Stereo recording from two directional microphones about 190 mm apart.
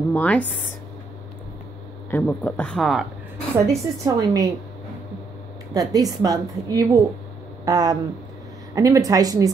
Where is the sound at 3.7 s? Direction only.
15° right (ahead or behind).